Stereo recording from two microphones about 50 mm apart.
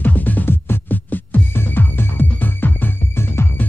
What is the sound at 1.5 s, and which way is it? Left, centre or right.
Music, left.